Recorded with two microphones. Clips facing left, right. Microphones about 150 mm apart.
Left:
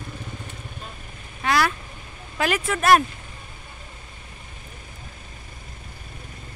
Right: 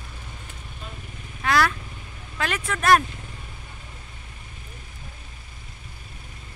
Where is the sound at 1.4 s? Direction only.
5° left (ahead or behind).